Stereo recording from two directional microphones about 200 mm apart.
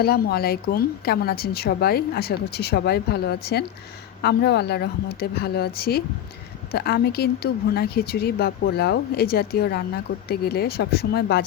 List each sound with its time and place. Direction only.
0.0 s speech: 50° left (ahead or behind)